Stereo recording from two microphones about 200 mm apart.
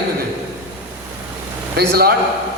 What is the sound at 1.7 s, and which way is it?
Speech, 50° right (ahead or behind).